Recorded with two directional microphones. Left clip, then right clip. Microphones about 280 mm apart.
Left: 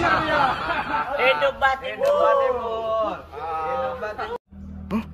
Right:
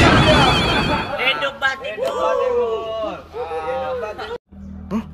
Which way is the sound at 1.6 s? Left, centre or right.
Centre.